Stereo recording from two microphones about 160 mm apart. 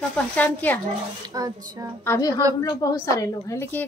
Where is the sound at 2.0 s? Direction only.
15° left (ahead or behind).